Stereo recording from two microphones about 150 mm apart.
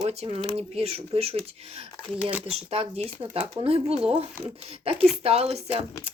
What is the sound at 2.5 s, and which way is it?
Speech, 40° right (ahead or behind).